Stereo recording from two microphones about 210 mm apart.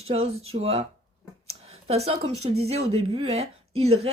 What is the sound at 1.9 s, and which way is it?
A woman's voice, 30° right (ahead or behind).